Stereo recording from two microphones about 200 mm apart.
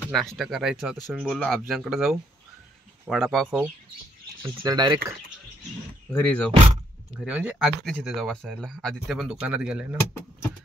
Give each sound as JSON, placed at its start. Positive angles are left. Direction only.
{"t": 0.1, "sound": "speech", "side_deg": 0}
{"t": 4.4, "sound": "speech", "side_deg": -20}
{"t": 6.1, "sound": "speech", "side_deg": 10}
{"t": 7.2, "sound": "speech", "side_deg": -5}